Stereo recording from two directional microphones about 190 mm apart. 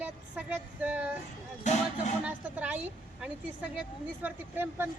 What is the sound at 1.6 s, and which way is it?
Speech, 40° left (ahead or behind).